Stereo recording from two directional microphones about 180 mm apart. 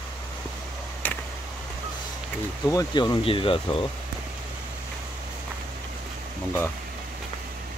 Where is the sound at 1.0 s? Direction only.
10° left (ahead or behind).